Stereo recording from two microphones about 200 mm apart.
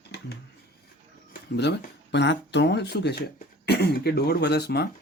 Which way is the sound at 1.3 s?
55° left (ahead or behind).